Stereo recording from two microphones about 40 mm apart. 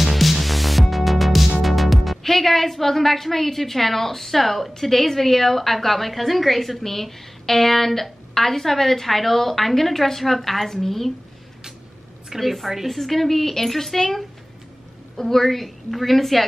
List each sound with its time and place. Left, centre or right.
0.0 s music: centre
12.4 s a woman's voice: centre